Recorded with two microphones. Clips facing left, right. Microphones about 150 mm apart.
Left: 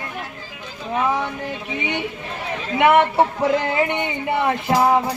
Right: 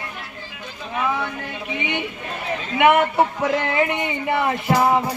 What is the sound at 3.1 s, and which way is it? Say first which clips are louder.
Music: left 2 dB; 30° left (ahead or behind).